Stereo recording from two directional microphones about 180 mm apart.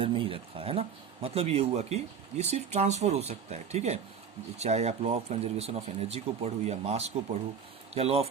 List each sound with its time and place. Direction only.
0.0 s speech: 30° right (ahead or behind)